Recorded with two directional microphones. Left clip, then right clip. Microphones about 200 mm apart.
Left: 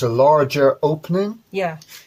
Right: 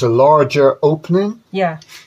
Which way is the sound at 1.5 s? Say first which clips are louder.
Right 7 dB; 35° left (ahead or behind).